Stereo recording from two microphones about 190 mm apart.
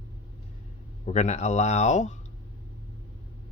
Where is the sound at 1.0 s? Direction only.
40° left (ahead or behind).